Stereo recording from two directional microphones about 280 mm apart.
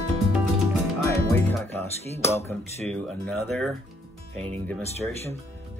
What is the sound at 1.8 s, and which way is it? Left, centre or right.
Speech, centre.